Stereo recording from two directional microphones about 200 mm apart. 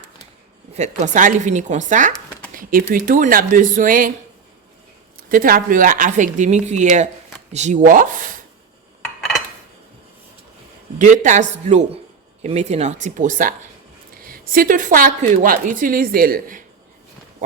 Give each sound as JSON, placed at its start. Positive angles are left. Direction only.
{"t": 0.7, "sound": "a woman's voice", "side_deg": -35}
{"t": 5.1, "sound": "speech", "side_deg": -45}
{"t": 9.0, "sound": "dishes", "side_deg": 0}
{"t": 10.9, "sound": "a woman's voice", "side_deg": -40}